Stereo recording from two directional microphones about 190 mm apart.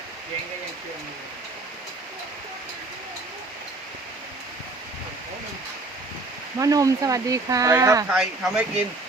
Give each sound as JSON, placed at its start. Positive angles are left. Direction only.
{"t": 6.6, "sound": "speech", "side_deg": -20}
{"t": 8.1, "sound": "speech", "side_deg": -5}